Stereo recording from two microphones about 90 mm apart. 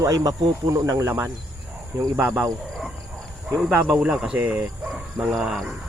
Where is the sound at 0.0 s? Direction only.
40° right (ahead or behind).